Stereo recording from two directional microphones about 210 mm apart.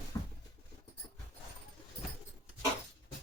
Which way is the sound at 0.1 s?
15° left (ahead or behind).